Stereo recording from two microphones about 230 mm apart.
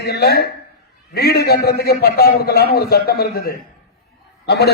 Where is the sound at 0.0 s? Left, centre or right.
Left.